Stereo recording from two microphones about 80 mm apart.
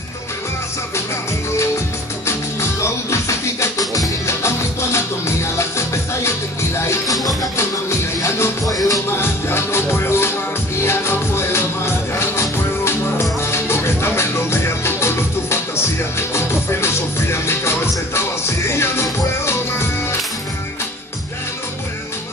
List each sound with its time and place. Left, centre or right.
2.8 s music: left
8.2 s music: left
9.1 s music: left